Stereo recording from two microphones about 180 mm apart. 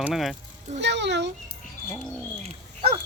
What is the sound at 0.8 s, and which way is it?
Speech, 75° right (ahead or behind).